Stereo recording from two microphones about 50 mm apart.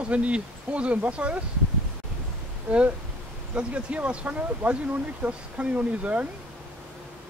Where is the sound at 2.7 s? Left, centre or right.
Right.